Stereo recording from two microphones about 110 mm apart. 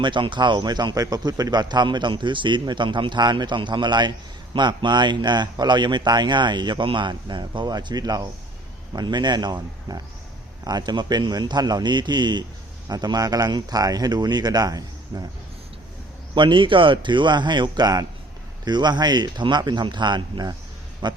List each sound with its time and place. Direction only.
0.0 s speech: 45° right (ahead or behind)
16.3 s speech: 45° right (ahead or behind)